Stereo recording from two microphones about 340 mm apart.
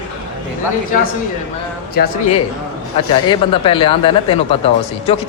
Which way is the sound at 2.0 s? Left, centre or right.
Left.